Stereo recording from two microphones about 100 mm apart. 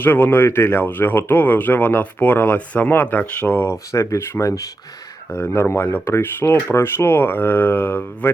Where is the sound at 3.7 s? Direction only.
30° left (ahead or behind).